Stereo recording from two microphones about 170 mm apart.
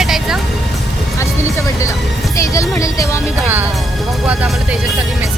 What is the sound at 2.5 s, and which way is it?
Speech, 20° left (ahead or behind).